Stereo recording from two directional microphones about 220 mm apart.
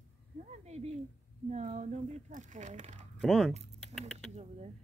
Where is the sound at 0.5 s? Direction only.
30° right (ahead or behind).